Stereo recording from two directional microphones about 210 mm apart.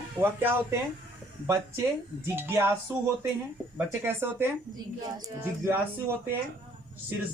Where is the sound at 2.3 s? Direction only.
10° right (ahead or behind).